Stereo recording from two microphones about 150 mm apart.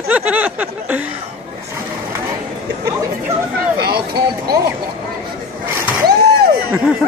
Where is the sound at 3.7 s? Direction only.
90° right.